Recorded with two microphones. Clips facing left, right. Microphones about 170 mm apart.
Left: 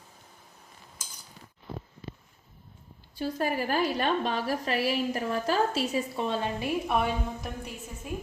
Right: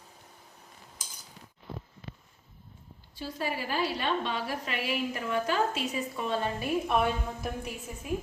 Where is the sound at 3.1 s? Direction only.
50° left (ahead or behind).